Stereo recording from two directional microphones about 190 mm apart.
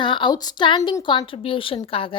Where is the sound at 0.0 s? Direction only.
25° left (ahead or behind).